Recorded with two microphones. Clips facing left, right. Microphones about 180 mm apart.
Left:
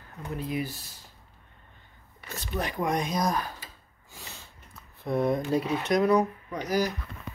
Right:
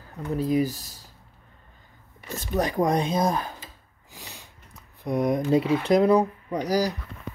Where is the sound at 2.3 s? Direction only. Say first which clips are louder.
Right 7 dB; 45° right (ahead or behind); by 3.6 s 25° right (ahead or behind).